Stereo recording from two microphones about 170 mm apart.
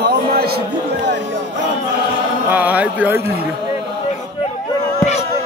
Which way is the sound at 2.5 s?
10° right (ahead or behind).